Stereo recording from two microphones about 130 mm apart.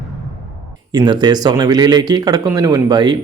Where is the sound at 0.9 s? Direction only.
35° right (ahead or behind).